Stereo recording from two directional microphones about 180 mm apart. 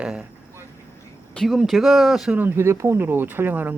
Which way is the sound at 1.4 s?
Centre (ahead or behind).